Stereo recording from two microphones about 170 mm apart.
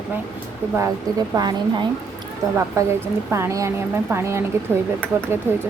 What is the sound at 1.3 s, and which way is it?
A woman's voice, 25° right (ahead or behind).